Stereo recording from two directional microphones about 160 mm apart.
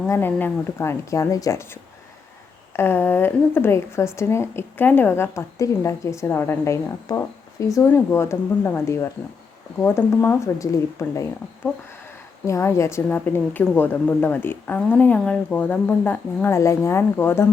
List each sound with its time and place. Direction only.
0.1 s a woman's voice: 15° left (ahead or behind)